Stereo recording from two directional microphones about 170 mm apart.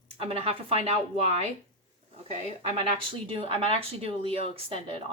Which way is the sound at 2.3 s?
40° right (ahead or behind).